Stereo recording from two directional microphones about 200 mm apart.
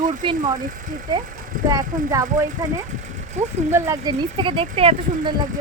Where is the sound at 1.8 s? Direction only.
40° right (ahead or behind).